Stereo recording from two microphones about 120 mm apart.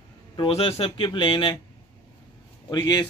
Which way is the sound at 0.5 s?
55° left (ahead or behind).